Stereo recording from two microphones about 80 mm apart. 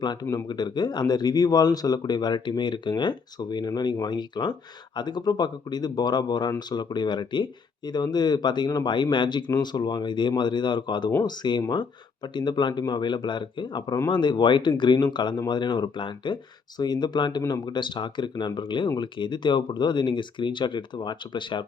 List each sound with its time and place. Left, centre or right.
0.0 s speech: left
9.5 s speech: left